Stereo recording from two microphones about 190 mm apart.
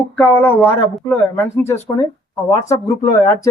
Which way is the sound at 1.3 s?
15° left (ahead or behind).